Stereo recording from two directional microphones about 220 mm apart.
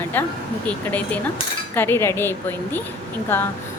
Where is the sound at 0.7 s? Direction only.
5° left (ahead or behind).